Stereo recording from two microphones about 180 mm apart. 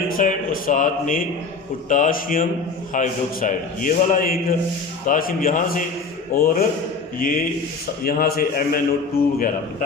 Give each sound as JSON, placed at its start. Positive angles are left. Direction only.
{"t": 0.1, "sound": "a man's voice", "side_deg": 50}